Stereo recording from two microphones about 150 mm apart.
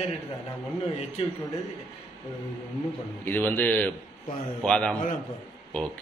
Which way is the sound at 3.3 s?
15° left (ahead or behind).